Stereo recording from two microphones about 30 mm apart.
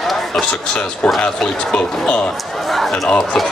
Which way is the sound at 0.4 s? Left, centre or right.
Left.